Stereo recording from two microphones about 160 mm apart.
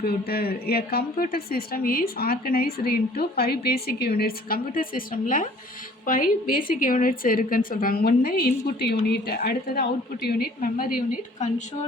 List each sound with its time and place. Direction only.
0.0 s a woman's voice: 70° left (ahead or behind)